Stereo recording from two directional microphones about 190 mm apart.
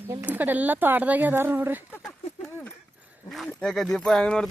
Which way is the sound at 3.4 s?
Centre (ahead or behind).